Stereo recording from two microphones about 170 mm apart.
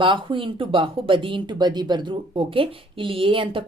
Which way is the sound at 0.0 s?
30° right (ahead or behind).